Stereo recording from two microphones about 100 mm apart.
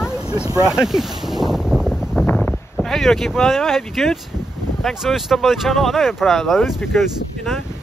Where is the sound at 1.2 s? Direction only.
5° right (ahead or behind).